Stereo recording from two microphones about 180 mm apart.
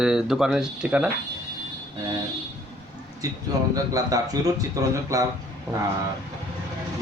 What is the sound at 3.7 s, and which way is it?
A man's voice, 20° right (ahead or behind).